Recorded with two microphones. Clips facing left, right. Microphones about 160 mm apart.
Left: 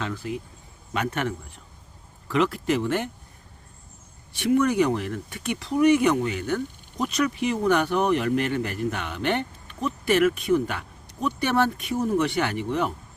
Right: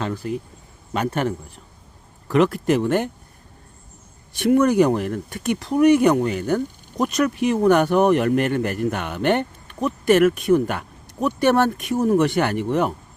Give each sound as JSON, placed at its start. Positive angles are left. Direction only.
{"t": 0.0, "sound": "speech", "side_deg": -40}
{"t": 2.2, "sound": "speech", "side_deg": -45}
{"t": 4.4, "sound": "speech", "side_deg": -50}